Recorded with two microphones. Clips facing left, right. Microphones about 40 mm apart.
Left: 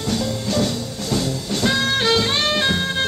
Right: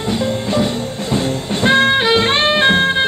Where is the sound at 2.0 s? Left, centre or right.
Right.